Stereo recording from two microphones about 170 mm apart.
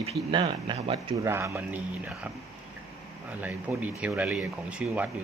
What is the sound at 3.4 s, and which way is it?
Speech, 10° right (ahead or behind).